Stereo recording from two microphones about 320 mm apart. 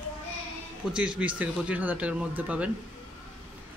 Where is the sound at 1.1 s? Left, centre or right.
Centre.